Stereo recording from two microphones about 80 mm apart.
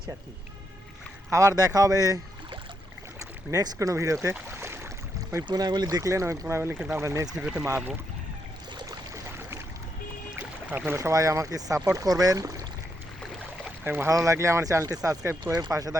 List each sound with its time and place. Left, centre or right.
1.3 s speech: right
3.2 s speech: right
4.6 s boat: right
5.5 s speech: right
6.0 s speech: right
7.3 s speech: centre
10.3 s boat: right
10.9 s speech: right
13.7 s boat: right
14.1 s speech: right